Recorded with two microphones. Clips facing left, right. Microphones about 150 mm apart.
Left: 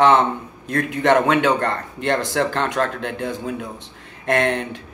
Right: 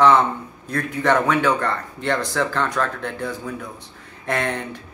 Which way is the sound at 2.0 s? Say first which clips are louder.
Left 2 dB; 20° left (ahead or behind).